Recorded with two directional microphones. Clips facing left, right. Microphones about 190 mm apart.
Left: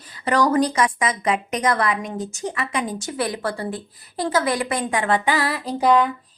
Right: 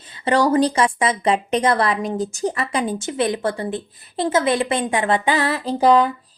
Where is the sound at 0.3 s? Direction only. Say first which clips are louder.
Right 2 dB; 30° right (ahead or behind).